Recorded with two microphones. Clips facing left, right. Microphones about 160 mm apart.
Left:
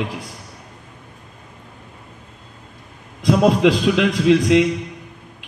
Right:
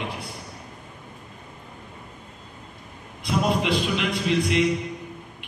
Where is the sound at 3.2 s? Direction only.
90° left.